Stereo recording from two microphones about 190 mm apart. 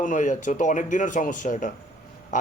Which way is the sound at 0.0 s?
40° left (ahead or behind).